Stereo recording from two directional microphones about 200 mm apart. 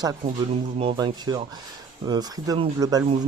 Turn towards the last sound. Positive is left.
turn(degrees=-15)  # may be behind; listen again after turning